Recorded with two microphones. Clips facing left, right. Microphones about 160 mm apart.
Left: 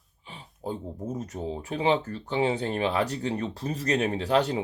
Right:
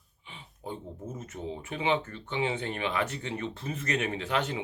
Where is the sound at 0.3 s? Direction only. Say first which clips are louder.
Left 5 dB; 35° left (ahead or behind).